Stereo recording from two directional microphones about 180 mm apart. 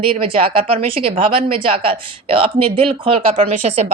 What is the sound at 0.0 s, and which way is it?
A woman's voice, 30° right (ahead or behind).